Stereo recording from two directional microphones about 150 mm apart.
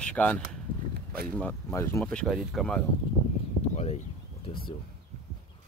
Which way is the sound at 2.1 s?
5° left (ahead or behind).